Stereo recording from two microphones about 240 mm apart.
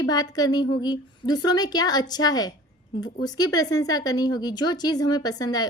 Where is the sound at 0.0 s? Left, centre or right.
Centre.